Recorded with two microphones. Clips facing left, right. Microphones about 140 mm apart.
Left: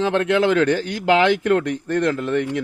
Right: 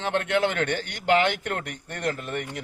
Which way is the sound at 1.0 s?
90° left.